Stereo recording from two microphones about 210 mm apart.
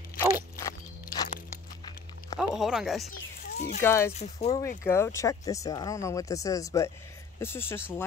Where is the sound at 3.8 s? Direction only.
10° left (ahead or behind).